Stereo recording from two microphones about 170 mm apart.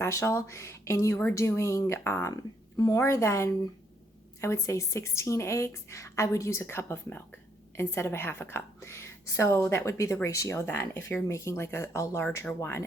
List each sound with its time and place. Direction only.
0.0 s a woman's voice: 15° left (ahead or behind)